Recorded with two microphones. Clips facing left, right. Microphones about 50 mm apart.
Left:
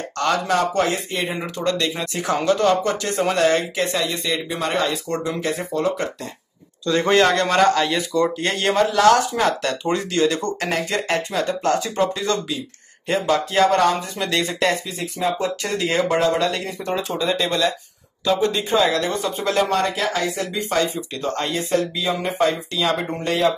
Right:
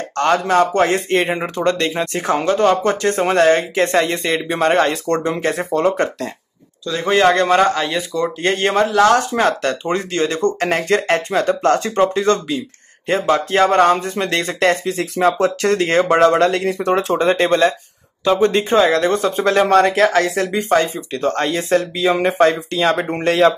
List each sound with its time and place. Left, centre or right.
0.2 s speech: right
1.3 s speech: right
2.8 s speech: right
6.9 s a man's voice: centre
7.3 s speech: right
8.4 s speech: right
9.3 s speech: right
14.4 s speech: right
15.0 s speech: right
20.7 s speech: right
21.2 s speech: right